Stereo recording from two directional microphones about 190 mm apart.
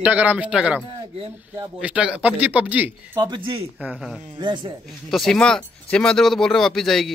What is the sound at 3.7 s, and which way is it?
Speech, 5° right (ahead or behind).